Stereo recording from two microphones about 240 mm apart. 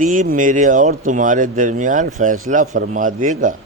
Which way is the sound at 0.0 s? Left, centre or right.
Right.